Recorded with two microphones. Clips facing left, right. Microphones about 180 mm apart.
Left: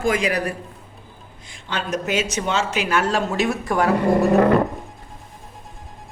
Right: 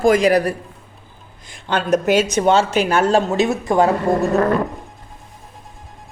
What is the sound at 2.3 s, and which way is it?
Speech, 35° right (ahead or behind).